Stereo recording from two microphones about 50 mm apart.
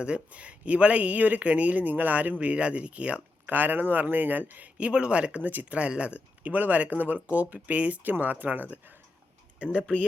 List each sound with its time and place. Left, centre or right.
0.0 s speech: right
2.4 s speech: right
3.4 s speech: right
4.8 s speech: right
5.4 s speech: right
6.4 s speech: right